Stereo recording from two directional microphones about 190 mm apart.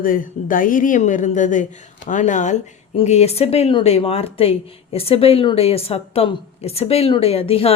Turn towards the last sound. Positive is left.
turn(degrees=30)  # may be behind; listen again after turning